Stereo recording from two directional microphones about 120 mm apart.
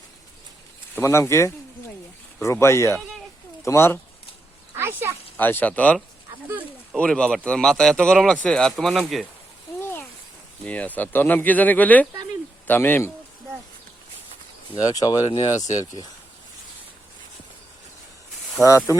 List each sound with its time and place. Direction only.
0.9 s speech: 25° left (ahead or behind)
4.8 s speech: 20° right (ahead or behind)
5.4 s speech: 15° left (ahead or behind); by 9.2 s centre (ahead or behind)
9.8 s a sound: 20° left (ahead or behind)
10.7 s speech: 10° left (ahead or behind)
14.9 s speech: 30° left (ahead or behind)
18.6 s speech: centre (ahead or behind)